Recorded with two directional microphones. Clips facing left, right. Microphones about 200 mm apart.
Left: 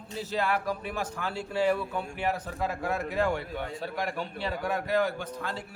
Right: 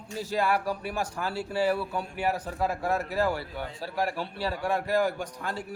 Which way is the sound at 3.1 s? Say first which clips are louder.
Left 1 dB; 5° right (ahead or behind).